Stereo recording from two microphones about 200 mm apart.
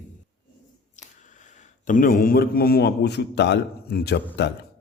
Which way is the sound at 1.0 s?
40° left (ahead or behind).